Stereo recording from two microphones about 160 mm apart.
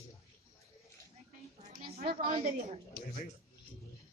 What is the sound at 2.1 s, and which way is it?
Speech, 60° right (ahead or behind).